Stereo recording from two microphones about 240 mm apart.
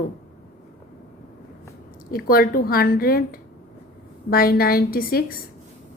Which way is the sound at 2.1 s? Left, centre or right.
Left.